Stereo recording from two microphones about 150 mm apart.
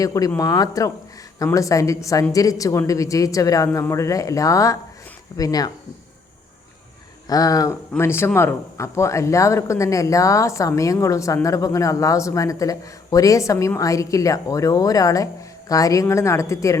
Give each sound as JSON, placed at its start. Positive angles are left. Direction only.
{"t": 0.0, "sound": "a man's voice", "side_deg": 25}
{"t": 7.3, "sound": "a man's voice", "side_deg": 25}